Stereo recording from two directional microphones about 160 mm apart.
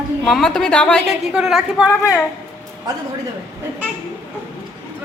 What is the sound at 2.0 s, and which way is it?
Speech, 20° left (ahead or behind).